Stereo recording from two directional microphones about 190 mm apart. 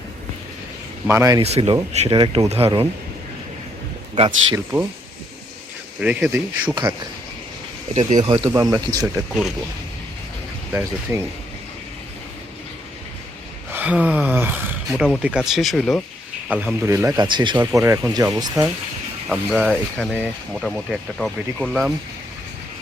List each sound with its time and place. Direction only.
1.0 s speech: 15° right (ahead or behind)
1.4 s speech: 30° right (ahead or behind)
4.5 s speech: 10° right (ahead or behind)
6.0 s speech: 5° right (ahead or behind)
7.9 s speech: 40° right (ahead or behind)
8.3 s speech: 20° right (ahead or behind)
10.7 s speech: 10° right (ahead or behind)
13.7 s speech: 10° right (ahead or behind)
19.3 s speech: centre (ahead or behind)